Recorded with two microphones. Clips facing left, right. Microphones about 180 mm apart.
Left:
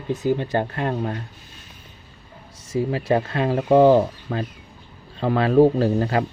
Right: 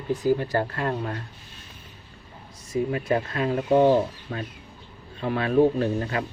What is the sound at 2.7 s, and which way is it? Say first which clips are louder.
Speech: left 3 dB; 30° left (ahead or behind).